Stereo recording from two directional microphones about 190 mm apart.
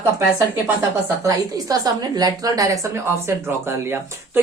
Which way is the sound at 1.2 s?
20° right (ahead or behind).